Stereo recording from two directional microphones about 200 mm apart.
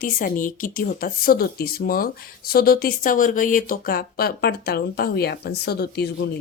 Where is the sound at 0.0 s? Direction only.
45° left (ahead or behind).